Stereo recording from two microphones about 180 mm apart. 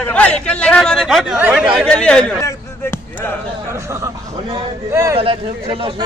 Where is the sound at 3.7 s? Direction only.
15° right (ahead or behind).